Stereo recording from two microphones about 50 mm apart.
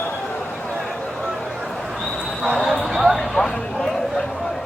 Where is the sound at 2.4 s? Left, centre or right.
Centre.